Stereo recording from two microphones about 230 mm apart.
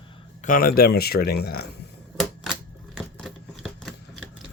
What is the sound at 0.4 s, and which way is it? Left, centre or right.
Speech, left.